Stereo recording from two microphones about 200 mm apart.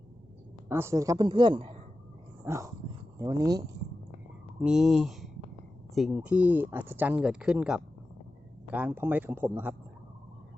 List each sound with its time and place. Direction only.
0.7 s a woman's voice: 15° right (ahead or behind)
2.4 s dog: 15° right (ahead or behind)
3.2 s speech: 15° right (ahead or behind)
4.6 s speech: 5° right (ahead or behind)